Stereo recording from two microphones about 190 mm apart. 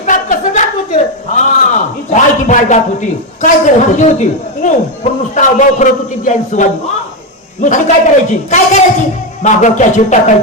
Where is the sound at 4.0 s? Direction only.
40° left (ahead or behind).